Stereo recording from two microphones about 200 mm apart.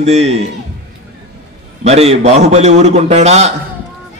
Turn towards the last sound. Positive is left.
turn(degrees=-35)  # may be behind; listen again after turning